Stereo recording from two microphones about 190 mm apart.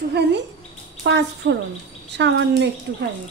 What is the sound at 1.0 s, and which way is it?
Speech, 65° right (ahead or behind).